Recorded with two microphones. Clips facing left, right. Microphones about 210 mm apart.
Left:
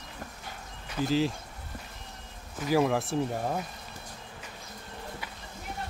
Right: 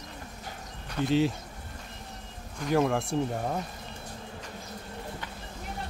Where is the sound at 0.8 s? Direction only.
Centre (ahead or behind).